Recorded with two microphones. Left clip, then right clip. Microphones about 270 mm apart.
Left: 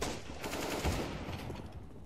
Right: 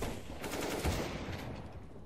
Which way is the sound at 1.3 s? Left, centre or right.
Centre.